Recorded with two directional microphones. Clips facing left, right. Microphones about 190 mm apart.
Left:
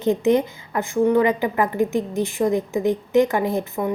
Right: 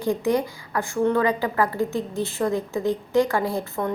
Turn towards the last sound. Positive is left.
turn(degrees=20)  # may be behind; listen again after turning